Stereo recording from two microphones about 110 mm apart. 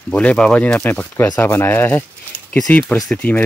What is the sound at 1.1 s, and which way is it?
Speech, 25° left (ahead or behind).